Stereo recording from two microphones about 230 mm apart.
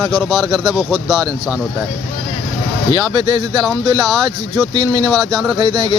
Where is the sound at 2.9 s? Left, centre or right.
Centre.